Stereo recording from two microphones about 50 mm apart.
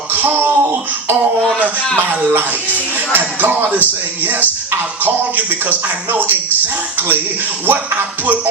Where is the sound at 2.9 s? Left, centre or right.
Right.